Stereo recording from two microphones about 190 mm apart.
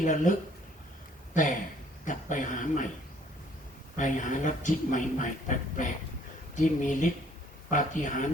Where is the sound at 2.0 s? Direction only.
40° left (ahead or behind).